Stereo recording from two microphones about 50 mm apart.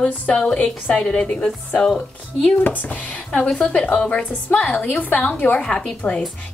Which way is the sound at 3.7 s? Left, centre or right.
Left.